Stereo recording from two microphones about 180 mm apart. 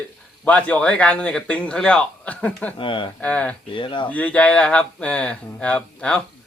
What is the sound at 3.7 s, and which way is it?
Speech, 25° left (ahead or behind).